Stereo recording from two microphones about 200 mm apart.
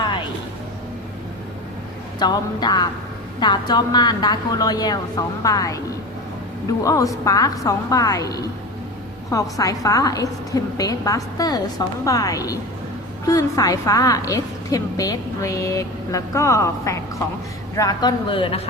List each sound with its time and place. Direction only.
2.1 s a woman's voice: 20° left (ahead or behind)